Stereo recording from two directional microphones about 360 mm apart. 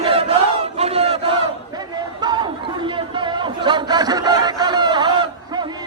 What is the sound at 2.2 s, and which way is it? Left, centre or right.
Chatter, centre.